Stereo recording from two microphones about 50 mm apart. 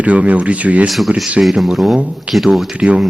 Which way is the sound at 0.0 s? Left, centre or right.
Right.